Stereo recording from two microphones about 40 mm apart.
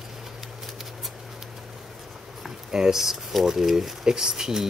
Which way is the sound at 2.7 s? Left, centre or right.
Centre.